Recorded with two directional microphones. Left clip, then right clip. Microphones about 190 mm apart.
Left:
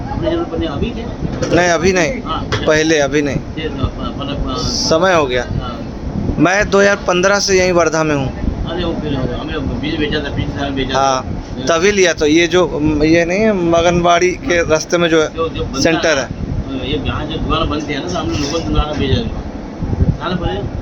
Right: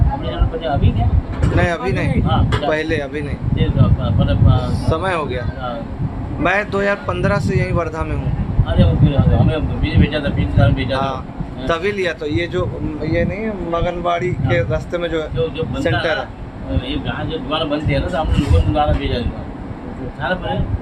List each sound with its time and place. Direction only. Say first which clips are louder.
1.5 s a man's voice: left 7 dB; 35° left (ahead or behind)
4.6 s a man's voice: left 7 dB; 30° left (ahead or behind)
10.9 s a man's voice: left 7 dB; 35° left (ahead or behind)